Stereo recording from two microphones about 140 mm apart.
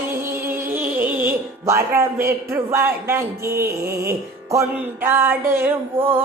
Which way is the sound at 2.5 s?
20° right (ahead or behind).